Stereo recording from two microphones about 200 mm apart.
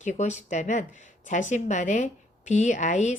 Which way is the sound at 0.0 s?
35° left (ahead or behind).